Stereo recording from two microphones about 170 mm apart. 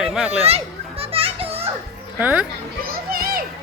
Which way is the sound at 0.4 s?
35° right (ahead or behind).